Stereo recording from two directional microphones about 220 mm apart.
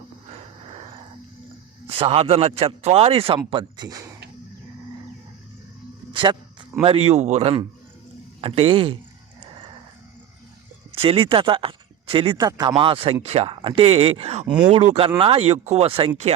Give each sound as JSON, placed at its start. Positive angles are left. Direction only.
{"t": 0.3, "sound": "a sound", "side_deg": -25}
{"t": 1.9, "sound": "a man's voice", "side_deg": -25}
{"t": 6.8, "sound": "a man's voice", "side_deg": -25}
{"t": 10.9, "sound": "a man's voice", "side_deg": -25}